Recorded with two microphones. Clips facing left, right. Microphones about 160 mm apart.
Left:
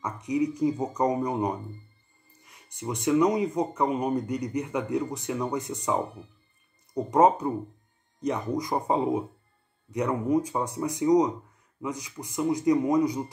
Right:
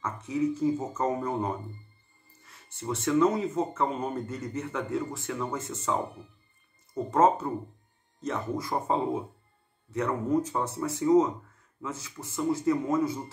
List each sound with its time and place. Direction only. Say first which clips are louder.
0.0 s speech: left 2 dB; 15° left (ahead or behind)